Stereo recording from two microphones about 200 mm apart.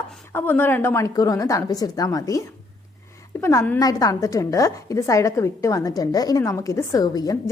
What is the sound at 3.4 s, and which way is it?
A woman's voice, 10° left (ahead or behind).